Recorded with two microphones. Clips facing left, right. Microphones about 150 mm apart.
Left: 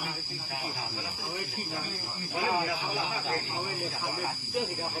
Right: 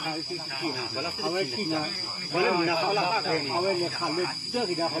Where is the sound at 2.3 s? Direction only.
90° right.